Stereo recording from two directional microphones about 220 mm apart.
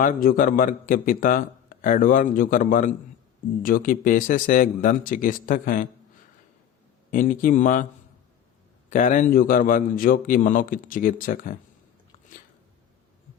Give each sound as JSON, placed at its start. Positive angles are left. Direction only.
{"t": 0.0, "sound": "speech", "side_deg": 40}
{"t": 7.1, "sound": "speech", "side_deg": 40}
{"t": 8.9, "sound": "speech", "side_deg": 35}